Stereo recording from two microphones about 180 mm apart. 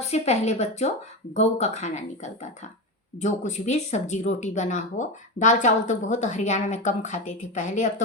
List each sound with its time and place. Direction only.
0.1 s speech: 40° left (ahead or behind)